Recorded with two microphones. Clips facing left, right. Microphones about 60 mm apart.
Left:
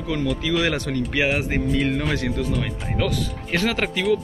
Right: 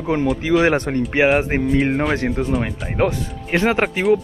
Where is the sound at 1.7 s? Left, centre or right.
Right.